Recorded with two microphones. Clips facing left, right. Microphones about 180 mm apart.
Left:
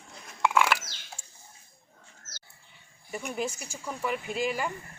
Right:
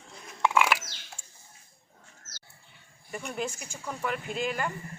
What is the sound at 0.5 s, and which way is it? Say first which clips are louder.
Bird: even; 10° right (ahead or behind).